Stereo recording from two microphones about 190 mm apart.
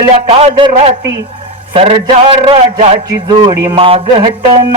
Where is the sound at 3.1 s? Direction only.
20° right (ahead or behind).